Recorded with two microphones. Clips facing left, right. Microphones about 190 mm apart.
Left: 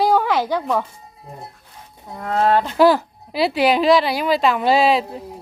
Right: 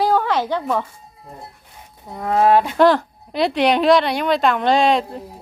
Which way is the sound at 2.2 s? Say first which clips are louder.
Right 3 dB; 15° right (ahead or behind).